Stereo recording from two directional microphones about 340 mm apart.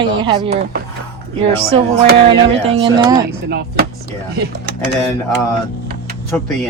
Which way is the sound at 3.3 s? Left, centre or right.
Right.